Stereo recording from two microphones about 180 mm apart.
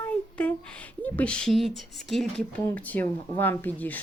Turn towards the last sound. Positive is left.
turn(degrees=10)  # may be behind; listen again after turning